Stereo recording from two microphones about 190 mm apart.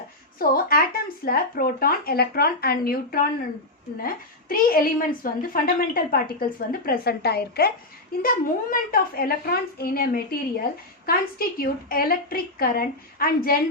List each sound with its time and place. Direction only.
0.3 s a woman's voice: 50° left (ahead or behind)